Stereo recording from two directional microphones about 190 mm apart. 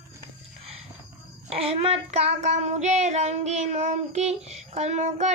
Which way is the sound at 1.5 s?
30° right (ahead or behind).